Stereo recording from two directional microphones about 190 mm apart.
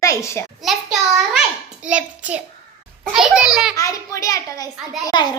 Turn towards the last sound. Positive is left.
turn(degrees=25)  # may be behind; listen again after turning